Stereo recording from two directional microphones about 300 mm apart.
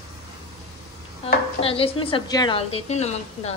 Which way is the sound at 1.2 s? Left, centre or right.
Centre.